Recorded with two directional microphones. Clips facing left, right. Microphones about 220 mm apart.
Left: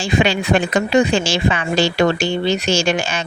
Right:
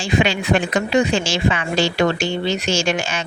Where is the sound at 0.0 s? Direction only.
35° left (ahead or behind).